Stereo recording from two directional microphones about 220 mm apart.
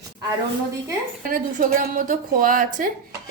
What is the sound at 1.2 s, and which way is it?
Speech, 40° right (ahead or behind).